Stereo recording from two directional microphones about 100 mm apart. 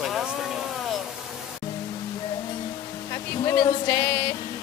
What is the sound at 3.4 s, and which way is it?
Music, 45° left (ahead or behind).